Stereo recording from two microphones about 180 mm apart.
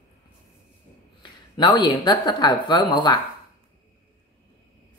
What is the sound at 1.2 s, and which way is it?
Speech, 25° left (ahead or behind).